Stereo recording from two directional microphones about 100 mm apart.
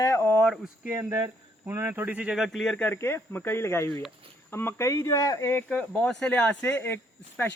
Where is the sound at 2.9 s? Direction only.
25° left (ahead or behind).